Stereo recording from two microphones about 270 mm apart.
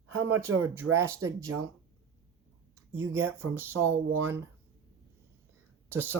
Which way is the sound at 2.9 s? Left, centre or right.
Centre.